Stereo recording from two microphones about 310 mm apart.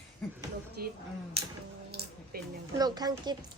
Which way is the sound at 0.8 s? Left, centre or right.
Right.